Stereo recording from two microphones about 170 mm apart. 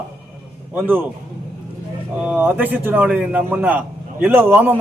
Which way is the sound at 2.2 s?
10° right (ahead or behind).